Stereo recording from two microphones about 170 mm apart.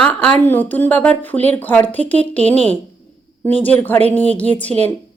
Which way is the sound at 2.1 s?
40° right (ahead or behind).